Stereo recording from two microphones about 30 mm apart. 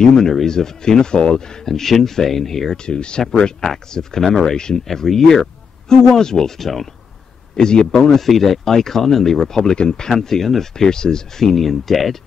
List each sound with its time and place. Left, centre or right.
0.0 s speech: left
1.7 s speech: centre
2.8 s speech: left
4.2 s speech: centre
5.9 s speech: left
8.2 s speech: centre